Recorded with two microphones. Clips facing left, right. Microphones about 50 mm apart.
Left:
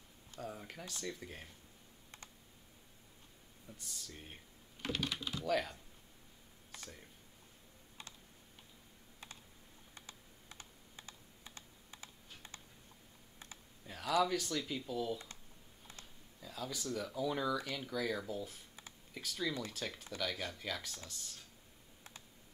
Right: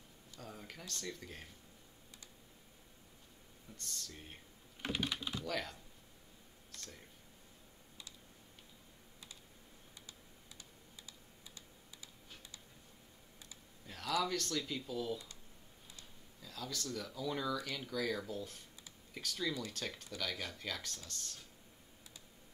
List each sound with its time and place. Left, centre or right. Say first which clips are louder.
0.4 s speech: left 4 dB; centre
3.7 s speech: right 2 dB; centre
4.8 s speech: even; centre
5.4 s speech: left 9 dB; centre
6.7 s a sound: left 2 dB; centre
9.9 s computer keyboard: left 4 dB; left
13.8 s speech: left 3 dB; centre
16.3 s speech: left 1 dB; centre